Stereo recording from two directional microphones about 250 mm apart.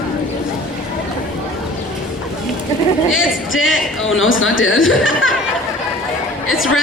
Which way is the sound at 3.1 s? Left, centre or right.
Left.